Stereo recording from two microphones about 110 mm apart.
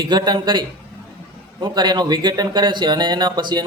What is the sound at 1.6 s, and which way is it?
A man's voice, 40° right (ahead or behind).